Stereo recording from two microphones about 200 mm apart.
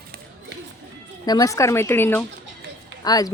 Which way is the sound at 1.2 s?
20° left (ahead or behind).